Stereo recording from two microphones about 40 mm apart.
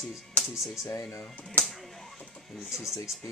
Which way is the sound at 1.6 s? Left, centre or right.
Centre.